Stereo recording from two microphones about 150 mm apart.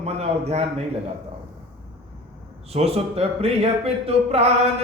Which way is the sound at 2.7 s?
40° right (ahead or behind).